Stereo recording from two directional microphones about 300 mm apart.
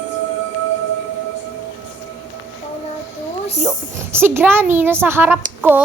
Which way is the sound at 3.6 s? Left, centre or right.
Centre.